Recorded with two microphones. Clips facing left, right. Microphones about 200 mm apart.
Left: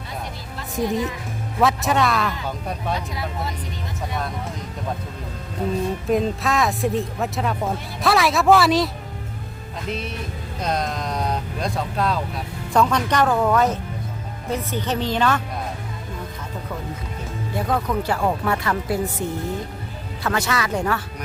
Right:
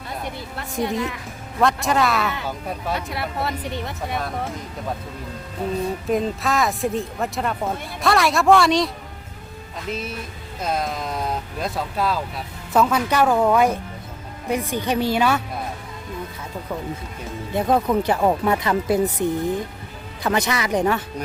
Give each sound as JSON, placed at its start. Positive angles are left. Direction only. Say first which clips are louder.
{"t": 0.5, "sound": "a woman's voice", "louder": "left 2 dB", "side_deg": -65}
{"t": 1.5, "sound": "speech", "louder": "even", "side_deg": 0}
{"t": 3.1, "sound": "speech", "louder": "right 3 dB", "side_deg": -65}
{"t": 6.1, "sound": "speech", "louder": "left 1 dB", "side_deg": 0}
{"t": 9.9, "sound": "speech", "louder": "even", "side_deg": 0}
{"t": 17.7, "sound": "speech", "louder": "right 4 dB", "side_deg": -20}